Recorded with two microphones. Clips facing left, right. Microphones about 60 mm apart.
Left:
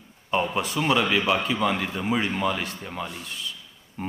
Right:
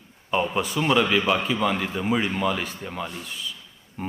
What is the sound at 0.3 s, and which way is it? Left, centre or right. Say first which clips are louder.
A man's voice: right 1 dB; centre.